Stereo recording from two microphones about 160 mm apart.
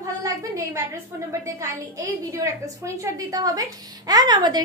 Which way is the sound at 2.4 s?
20° right (ahead or behind).